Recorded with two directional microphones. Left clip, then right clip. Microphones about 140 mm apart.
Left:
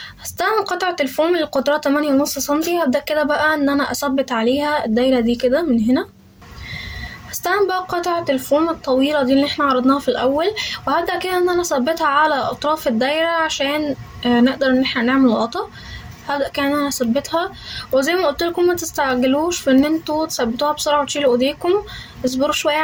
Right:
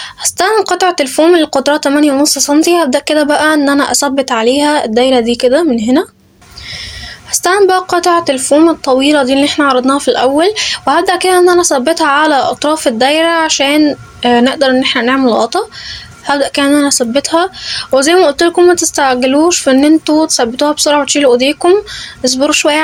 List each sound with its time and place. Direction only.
0.2 s speech: 35° right (ahead or behind)
7.3 s speech: 40° right (ahead or behind)